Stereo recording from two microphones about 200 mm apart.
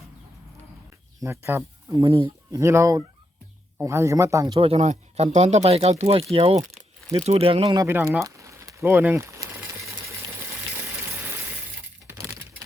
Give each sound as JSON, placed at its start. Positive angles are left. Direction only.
{"t": 1.2, "sound": "speech", "side_deg": -15}
{"t": 2.0, "sound": "speech", "side_deg": -25}
{"t": 2.6, "sound": "speech", "side_deg": -15}